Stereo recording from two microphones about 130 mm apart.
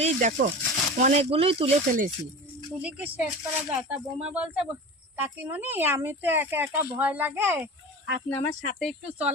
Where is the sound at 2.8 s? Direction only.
10° right (ahead or behind).